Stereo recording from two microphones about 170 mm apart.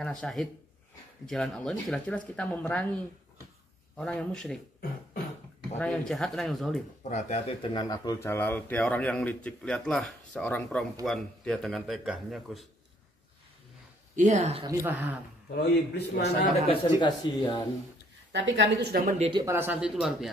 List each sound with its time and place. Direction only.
0.0 s speech: centre (ahead or behind)
5.8 s speech: 5° left (ahead or behind)
7.0 s speech: 45° left (ahead or behind)
7.7 s a man's voice: 25° left (ahead or behind); by 12.6 s centre (ahead or behind)
14.1 s speech: 45° right (ahead or behind)
14.6 s speech: 15° right (ahead or behind)
15.5 s a man's voice: 75° left (ahead or behind)
16.2 s speech: 40° left (ahead or behind)
17.0 s speech: 25° left (ahead or behind)
18.3 s a woman's voice: 90° right; by 19.0 s 75° right (ahead or behind)
19.0 s speech: 40° right (ahead or behind)
19.4 s speech: 15° right (ahead or behind)